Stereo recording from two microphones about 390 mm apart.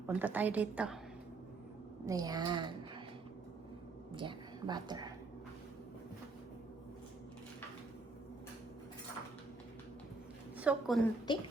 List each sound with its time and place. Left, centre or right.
0.1 s a woman's voice: centre
2.0 s speech: centre
4.1 s a woman's voice: centre
10.6 s a woman's voice: centre
11.3 s speech: centre